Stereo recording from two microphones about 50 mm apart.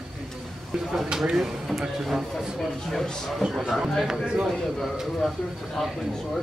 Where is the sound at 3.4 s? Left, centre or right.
Centre.